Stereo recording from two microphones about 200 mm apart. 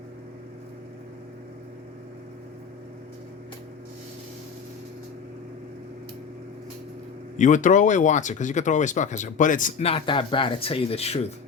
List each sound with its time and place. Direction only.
7.3 s speech: 40° left (ahead or behind)